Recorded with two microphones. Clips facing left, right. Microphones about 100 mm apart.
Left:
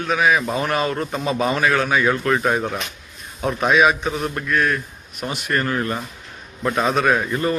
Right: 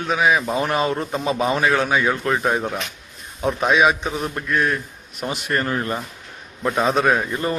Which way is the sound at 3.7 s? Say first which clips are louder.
Left 1 dB; 20° right (ahead or behind).